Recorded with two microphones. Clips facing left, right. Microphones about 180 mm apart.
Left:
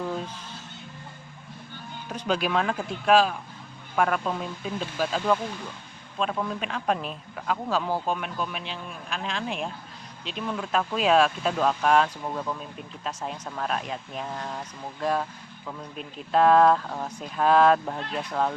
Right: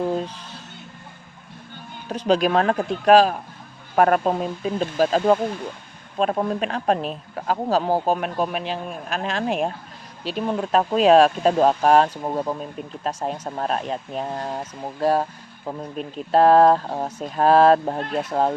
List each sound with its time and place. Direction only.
2.0 s speech: 35° right (ahead or behind)